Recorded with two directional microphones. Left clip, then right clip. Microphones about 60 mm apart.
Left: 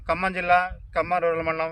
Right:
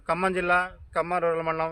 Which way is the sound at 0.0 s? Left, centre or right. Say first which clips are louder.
Left 1 dB; right.